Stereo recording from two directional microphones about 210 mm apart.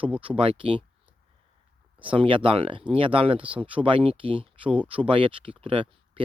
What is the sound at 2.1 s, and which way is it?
Speech, 25° right (ahead or behind).